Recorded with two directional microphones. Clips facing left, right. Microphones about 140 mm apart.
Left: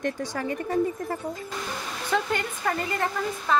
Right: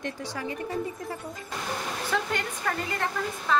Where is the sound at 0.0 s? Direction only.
50° left (ahead or behind).